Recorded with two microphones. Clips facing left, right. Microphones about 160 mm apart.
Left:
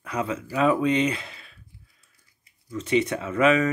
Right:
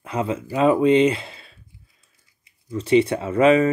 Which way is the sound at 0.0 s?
30° right (ahead or behind).